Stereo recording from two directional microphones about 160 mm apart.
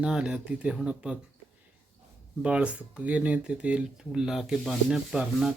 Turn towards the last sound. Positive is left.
turn(degrees=0)  # may be behind; listen again after turning